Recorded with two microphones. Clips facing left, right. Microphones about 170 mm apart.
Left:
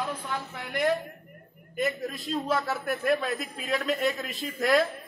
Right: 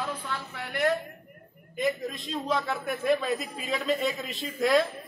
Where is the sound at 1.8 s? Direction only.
5° left (ahead or behind).